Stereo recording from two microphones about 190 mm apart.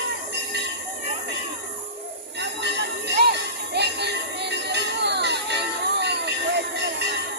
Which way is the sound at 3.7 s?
60° right (ahead or behind).